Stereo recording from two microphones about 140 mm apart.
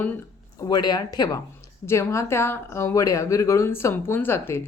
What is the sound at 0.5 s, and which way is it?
Speech, 30° left (ahead or behind).